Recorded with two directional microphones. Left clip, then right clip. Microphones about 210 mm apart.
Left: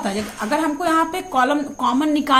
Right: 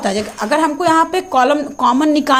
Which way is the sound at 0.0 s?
35° right (ahead or behind).